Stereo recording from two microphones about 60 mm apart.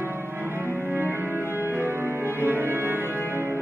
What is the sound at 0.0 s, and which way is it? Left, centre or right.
Music, right.